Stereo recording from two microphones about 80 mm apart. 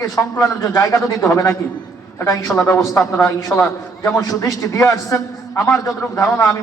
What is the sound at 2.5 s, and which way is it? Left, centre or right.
Speech, centre.